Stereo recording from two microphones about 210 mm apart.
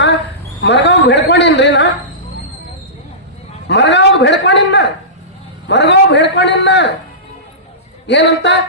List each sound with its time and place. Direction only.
0.6 s a man's voice: 55° left (ahead or behind)
3.7 s a man's voice: 55° left (ahead or behind)
8.0 s a man's voice: 55° left (ahead or behind)